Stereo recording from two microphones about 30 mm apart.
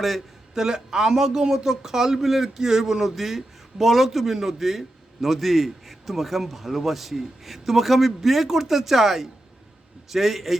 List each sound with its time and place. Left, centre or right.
0.5 s a man's voice: centre